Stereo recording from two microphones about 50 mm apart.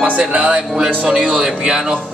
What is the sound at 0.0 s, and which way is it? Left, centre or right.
Speech, right.